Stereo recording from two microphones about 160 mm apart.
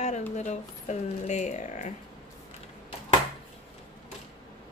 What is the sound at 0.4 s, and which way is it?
Speech, 45° left (ahead or behind).